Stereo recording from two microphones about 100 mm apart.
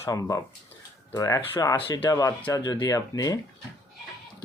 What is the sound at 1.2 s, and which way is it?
Speech, 35° left (ahead or behind).